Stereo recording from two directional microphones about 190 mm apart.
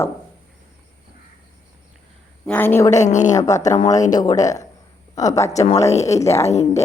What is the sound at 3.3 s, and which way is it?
A woman's voice, 15° left (ahead or behind).